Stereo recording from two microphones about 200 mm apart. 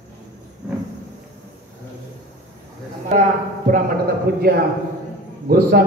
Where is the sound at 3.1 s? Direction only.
35° right (ahead or behind).